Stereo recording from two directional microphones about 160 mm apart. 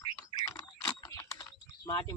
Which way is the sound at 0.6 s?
25° left (ahead or behind).